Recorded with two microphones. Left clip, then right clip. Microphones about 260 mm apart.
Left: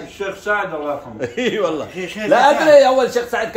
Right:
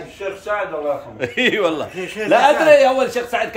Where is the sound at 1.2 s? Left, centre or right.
Centre.